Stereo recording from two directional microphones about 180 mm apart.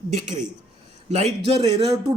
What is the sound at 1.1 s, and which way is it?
A woman's voice, 35° right (ahead or behind).